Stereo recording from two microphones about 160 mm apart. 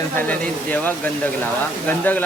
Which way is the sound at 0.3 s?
10° left (ahead or behind).